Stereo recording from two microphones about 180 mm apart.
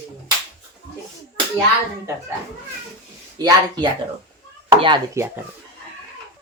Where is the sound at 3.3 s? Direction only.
20° right (ahead or behind).